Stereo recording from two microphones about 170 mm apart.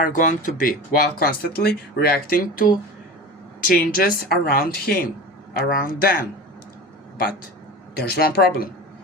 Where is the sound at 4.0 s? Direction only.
60° left (ahead or behind).